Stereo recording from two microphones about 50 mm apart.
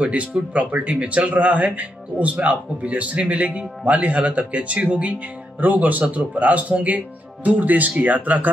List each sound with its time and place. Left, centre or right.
0.0 s a man's voice: right